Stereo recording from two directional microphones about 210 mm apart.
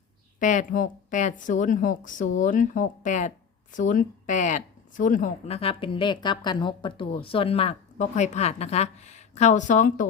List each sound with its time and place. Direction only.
0.3 s speech: 35° left (ahead or behind)